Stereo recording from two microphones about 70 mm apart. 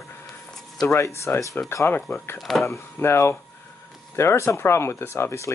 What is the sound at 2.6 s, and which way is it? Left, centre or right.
Speech, left.